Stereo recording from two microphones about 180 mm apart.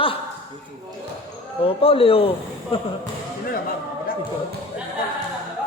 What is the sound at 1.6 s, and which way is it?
A man's voice, 30° left (ahead or behind).